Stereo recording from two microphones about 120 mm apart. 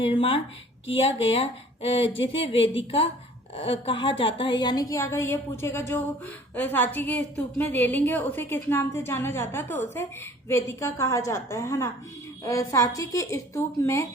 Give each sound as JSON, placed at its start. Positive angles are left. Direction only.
{"t": 0.0, "sound": "a woman's voice", "side_deg": 45}